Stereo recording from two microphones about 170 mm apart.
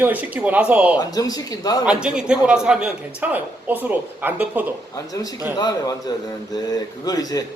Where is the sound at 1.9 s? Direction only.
5° right (ahead or behind).